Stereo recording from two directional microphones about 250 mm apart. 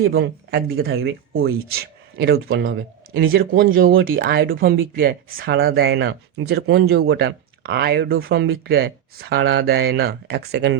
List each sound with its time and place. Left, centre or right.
0.0 s speech: right
9.3 s speech: right